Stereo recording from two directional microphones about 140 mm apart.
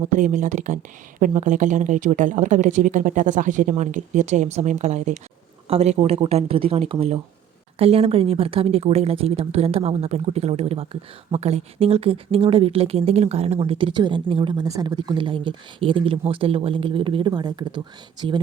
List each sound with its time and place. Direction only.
0.2 s speech: 65° right (ahead or behind)
5.6 s a woman's voice: 45° right (ahead or behind)